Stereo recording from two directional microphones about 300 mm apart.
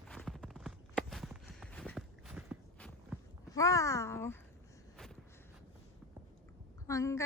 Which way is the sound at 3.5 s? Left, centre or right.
Centre.